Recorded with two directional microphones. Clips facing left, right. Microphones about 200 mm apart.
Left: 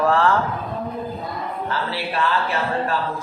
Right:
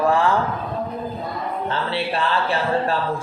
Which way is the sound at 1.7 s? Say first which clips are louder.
Right 3 dB; 25° right (ahead or behind).